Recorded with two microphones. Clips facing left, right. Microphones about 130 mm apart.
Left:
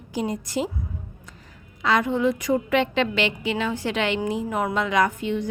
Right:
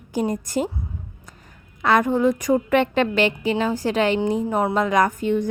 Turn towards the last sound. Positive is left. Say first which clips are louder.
# right 3 dB
turn(degrees=-45)  # may be behind; listen again after turning